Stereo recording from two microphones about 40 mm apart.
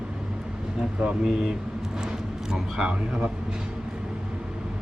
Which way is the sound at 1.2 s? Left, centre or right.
Centre.